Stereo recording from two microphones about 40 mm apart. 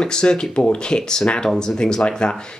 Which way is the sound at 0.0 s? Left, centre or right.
Centre.